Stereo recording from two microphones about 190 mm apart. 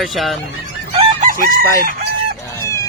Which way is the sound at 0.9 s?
45° right (ahead or behind).